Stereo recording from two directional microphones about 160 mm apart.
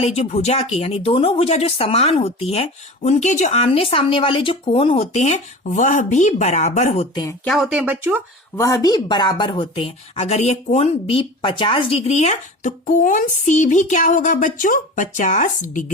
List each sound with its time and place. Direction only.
0.0 s speech: 40° left (ahead or behind)
7.1 s speech: 20° left (ahead or behind)
7.4 s speech: centre (ahead or behind)
8.5 s speech: 20° left (ahead or behind); by 15.8 s 55° left (ahead or behind)